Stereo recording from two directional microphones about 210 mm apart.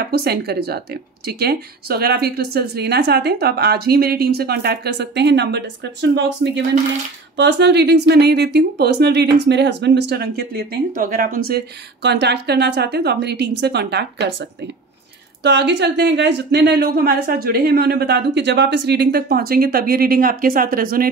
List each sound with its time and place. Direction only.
0.0 s speech: 50° right (ahead or behind)
15.4 s speech: 55° right (ahead or behind)